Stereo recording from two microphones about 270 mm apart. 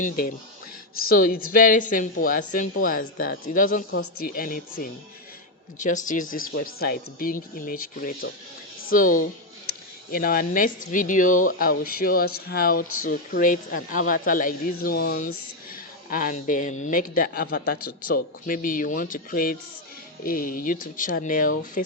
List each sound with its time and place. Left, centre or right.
0.0 s speech: left